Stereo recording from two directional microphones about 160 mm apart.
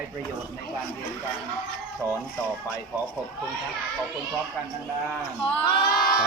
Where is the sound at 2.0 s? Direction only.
15° right (ahead or behind).